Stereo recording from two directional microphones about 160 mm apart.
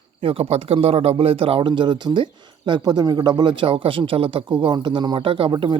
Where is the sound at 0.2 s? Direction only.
35° right (ahead or behind).